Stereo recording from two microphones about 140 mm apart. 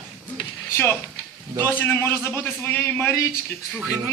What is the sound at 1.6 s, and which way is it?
A man's voice, 15° left (ahead or behind).